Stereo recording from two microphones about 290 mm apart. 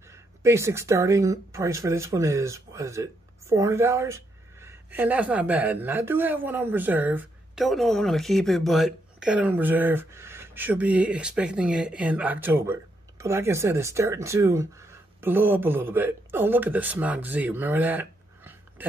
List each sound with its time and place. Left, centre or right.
0.1 s speech: centre